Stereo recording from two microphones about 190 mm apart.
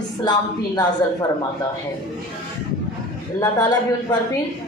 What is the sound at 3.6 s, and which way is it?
Speech, 20° left (ahead or behind).